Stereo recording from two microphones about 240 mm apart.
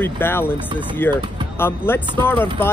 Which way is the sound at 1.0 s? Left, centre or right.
Centre.